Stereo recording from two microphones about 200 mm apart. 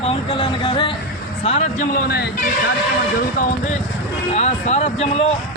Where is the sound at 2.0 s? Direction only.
55° left (ahead or behind).